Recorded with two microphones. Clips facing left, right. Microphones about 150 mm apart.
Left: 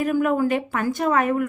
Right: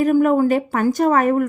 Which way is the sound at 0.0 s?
40° right (ahead or behind).